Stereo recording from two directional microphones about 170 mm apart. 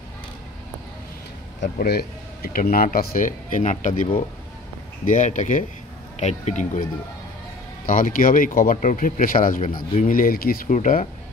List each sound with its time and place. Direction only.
1.6 s speech: 70° left (ahead or behind); by 11.1 s 50° left (ahead or behind)